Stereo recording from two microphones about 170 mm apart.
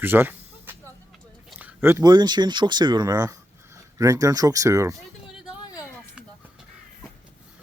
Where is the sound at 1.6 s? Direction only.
10° right (ahead or behind).